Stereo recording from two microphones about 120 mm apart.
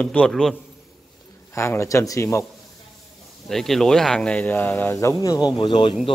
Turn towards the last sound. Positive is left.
turn(degrees=45)  # may be behind; listen again after turning